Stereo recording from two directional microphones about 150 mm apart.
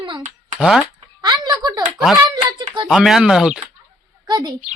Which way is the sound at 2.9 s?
Centre (ahead or behind).